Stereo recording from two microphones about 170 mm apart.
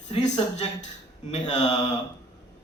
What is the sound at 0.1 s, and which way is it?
Speech, 40° left (ahead or behind).